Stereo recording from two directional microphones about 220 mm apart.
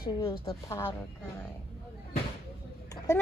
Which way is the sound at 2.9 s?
15° left (ahead or behind).